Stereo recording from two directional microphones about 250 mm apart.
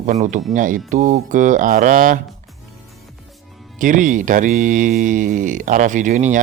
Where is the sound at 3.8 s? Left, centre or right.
Right.